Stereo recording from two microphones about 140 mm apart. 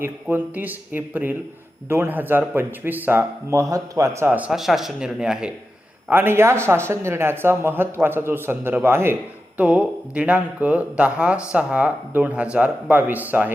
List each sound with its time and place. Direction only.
0.0 s speech: 15° right (ahead or behind)